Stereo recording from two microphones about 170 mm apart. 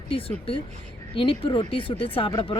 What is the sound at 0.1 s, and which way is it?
A woman's voice, 35° left (ahead or behind).